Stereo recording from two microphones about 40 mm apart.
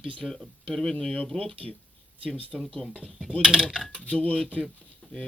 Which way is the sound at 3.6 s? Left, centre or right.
Left.